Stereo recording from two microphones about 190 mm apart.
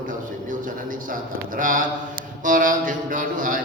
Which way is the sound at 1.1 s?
45° right (ahead or behind).